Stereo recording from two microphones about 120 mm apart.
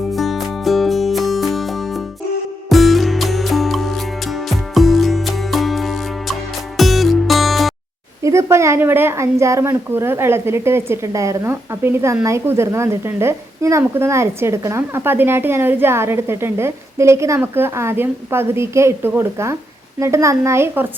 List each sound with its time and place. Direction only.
0.1 s music: centre (ahead or behind)
8.2 s a woman's voice: 25° right (ahead or behind)